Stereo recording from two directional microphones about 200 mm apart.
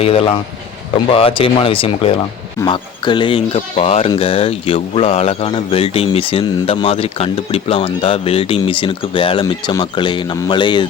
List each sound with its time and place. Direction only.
0.0 s speech: 30° left (ahead or behind)